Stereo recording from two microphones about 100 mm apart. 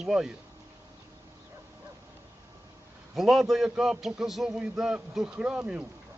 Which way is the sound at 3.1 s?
5° right (ahead or behind).